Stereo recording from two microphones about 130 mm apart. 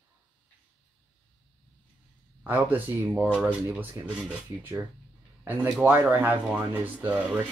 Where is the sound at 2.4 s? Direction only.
15° right (ahead or behind).